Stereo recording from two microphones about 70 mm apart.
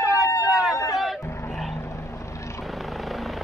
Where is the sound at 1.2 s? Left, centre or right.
Left.